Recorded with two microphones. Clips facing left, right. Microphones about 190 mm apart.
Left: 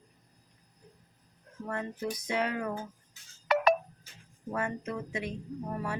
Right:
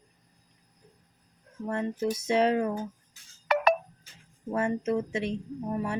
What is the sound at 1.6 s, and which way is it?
Speech, 25° right (ahead or behind).